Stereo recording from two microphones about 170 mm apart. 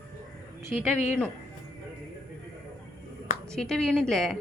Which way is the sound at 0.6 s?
10° right (ahead or behind).